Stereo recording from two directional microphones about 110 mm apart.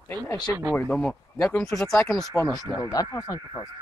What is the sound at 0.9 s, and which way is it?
Speech, 15° left (ahead or behind).